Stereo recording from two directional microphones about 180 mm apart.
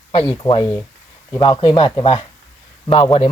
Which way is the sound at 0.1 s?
30° left (ahead or behind).